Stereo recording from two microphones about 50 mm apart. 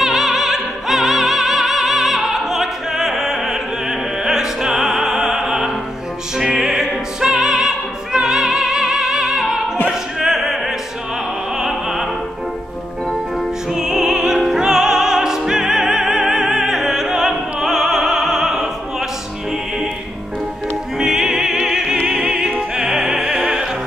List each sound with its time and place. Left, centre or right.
0.0 s opera: centre
11.6 s opera: centre
13.7 s music: centre
21.0 s music: centre
22.8 s opera: centre